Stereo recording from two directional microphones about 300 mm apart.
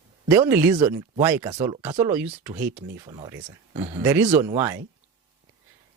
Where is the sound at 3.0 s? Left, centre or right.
Centre.